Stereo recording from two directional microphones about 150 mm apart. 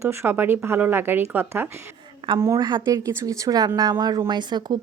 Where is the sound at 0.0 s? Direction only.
15° right (ahead or behind).